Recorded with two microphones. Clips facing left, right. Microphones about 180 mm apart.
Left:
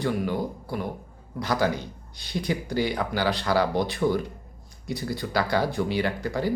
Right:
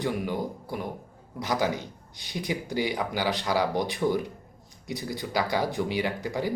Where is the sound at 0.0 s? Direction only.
20° right (ahead or behind).